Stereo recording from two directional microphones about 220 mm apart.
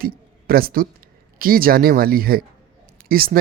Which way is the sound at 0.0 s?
40° right (ahead or behind).